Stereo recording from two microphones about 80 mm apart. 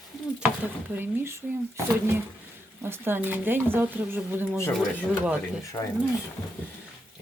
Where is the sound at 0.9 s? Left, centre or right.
Right.